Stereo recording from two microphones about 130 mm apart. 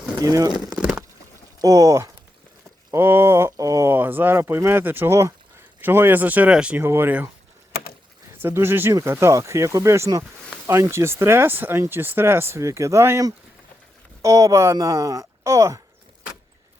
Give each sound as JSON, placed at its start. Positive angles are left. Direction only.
{"t": 0.2, "sound": "speech", "side_deg": -25}
{"t": 0.8, "sound": "stomach rumble", "side_deg": -5}
{"t": 1.6, "sound": "speech", "side_deg": -25}
{"t": 8.4, "sound": "speech", "side_deg": -20}